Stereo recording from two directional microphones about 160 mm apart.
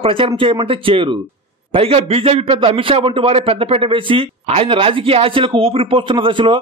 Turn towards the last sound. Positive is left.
turn(degrees=-35)  # may be behind; listen again after turning